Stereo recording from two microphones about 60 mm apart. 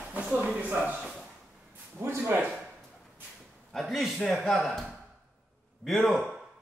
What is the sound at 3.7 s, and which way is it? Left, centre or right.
A man's voice, centre.